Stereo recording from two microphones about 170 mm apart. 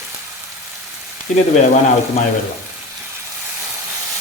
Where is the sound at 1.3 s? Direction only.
45° left (ahead or behind).